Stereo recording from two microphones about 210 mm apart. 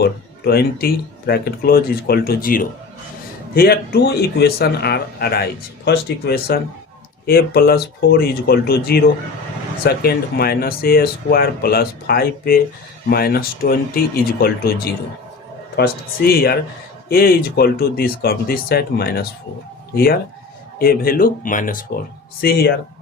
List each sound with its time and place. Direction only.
0.0 s speech: 50° left (ahead or behind)
15.7 s speech: 45° left (ahead or behind)
20.7 s speech: 45° left (ahead or behind)